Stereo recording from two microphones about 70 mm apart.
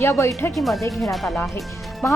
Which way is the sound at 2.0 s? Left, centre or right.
Left.